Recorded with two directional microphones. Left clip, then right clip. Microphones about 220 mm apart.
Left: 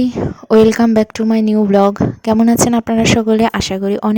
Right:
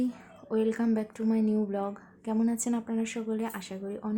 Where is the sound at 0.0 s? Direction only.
45° left (ahead or behind).